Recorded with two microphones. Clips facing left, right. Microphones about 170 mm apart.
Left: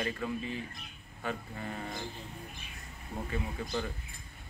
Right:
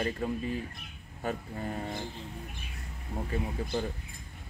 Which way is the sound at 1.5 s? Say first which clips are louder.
Right 4 dB; 30° right (ahead or behind).